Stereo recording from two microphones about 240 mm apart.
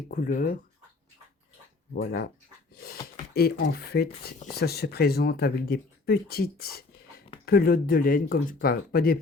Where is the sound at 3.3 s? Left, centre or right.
Left.